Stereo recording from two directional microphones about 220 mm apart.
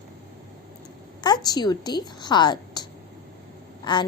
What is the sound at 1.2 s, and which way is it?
A woman's voice, 20° left (ahead or behind).